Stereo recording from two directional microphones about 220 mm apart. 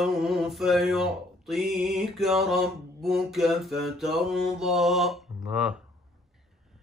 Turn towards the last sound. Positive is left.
turn(degrees=-5)  # may be behind; listen again after turning